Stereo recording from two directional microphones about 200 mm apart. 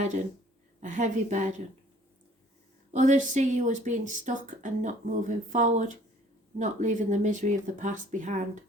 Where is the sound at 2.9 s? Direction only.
40° right (ahead or behind).